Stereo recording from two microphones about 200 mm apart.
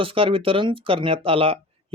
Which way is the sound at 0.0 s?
25° right (ahead or behind).